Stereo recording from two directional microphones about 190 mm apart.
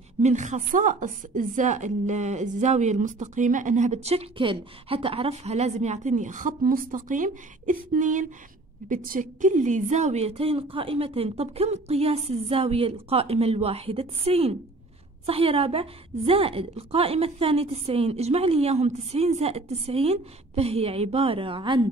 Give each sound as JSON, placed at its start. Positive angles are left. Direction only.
{"t": 0.2, "sound": "speech", "side_deg": -40}